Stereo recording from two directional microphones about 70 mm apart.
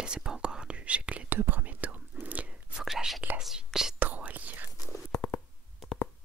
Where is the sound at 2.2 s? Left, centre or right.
Centre.